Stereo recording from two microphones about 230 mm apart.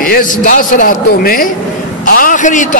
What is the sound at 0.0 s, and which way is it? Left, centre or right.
A man's voice, left.